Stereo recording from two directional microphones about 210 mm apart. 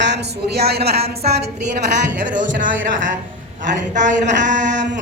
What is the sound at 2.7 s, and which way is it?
A woman's voice, 65° right (ahead or behind).